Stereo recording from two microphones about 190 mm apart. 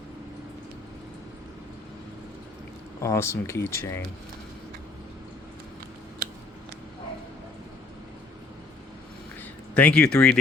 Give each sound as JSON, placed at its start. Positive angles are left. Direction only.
{"t": 3.0, "sound": "speech", "side_deg": 15}
{"t": 9.4, "sound": "speech", "side_deg": 5}